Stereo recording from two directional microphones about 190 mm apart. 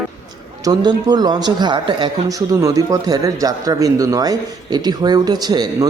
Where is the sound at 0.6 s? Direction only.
20° right (ahead or behind).